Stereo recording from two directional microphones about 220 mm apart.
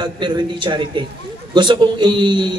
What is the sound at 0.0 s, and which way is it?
A man's voice, 20° right (ahead or behind).